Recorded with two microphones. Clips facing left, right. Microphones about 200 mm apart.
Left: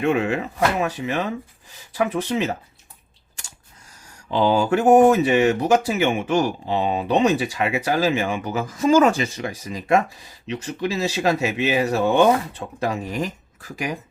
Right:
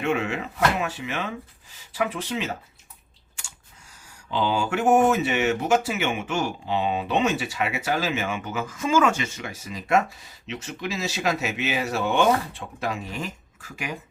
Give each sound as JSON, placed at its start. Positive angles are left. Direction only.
{"t": 0.0, "sound": "speech", "side_deg": 35}
{"t": 4.3, "sound": "speech", "side_deg": 40}